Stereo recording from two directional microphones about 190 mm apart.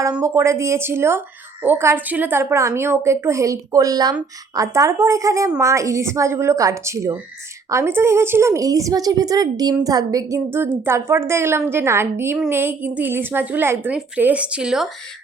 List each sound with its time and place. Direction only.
0.0 s a woman's voice: 15° right (ahead or behind)